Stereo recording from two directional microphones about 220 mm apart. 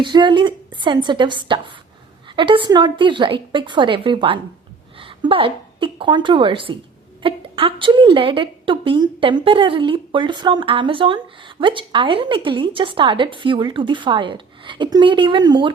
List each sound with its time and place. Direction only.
0.0 s a woman's voice: 20° right (ahead or behind)